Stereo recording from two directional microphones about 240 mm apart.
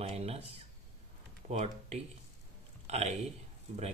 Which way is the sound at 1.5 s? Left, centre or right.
Right.